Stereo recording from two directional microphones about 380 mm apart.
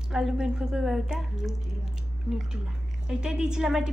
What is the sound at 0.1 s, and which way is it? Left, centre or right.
A woman's voice, centre.